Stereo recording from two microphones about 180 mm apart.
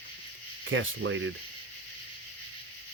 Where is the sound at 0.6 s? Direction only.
90° right.